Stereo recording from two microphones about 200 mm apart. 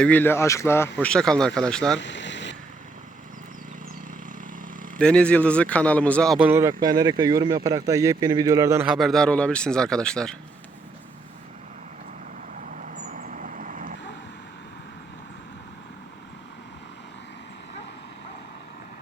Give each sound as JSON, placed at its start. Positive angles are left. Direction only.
{"t": 0.0, "sound": "speech", "side_deg": 10}
{"t": 2.0, "sound": "vehicle", "side_deg": 60}
{"t": 4.9, "sound": "speech", "side_deg": 5}
{"t": 6.5, "sound": "speech", "side_deg": -15}
{"t": 12.6, "sound": "vehicle", "side_deg": -40}